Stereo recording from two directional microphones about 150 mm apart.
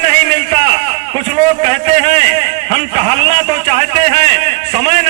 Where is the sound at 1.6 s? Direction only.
40° right (ahead or behind).